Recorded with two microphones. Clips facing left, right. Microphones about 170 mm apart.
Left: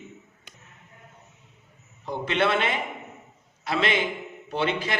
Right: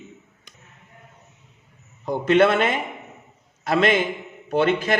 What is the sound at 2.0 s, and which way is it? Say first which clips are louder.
A man's voice: right 8 dB; 45° right (ahead or behind).